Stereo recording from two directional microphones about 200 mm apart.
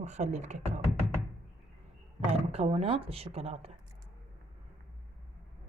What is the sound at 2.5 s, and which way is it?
Speech, 30° right (ahead or behind).